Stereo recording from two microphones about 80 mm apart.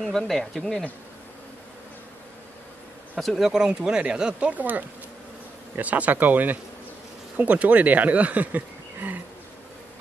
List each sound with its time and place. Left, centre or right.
0.3 s speech: centre
3.2 s speech: centre; by 9.2 s right